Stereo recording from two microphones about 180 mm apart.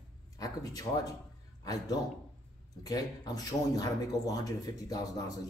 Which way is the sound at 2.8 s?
20° left (ahead or behind).